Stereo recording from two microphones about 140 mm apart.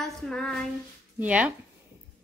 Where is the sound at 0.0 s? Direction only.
5° left (ahead or behind).